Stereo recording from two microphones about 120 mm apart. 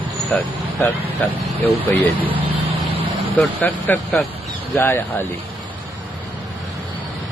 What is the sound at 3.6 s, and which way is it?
Speech, 15° left (ahead or behind).